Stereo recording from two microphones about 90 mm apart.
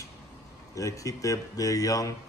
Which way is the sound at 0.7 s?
40° left (ahead or behind).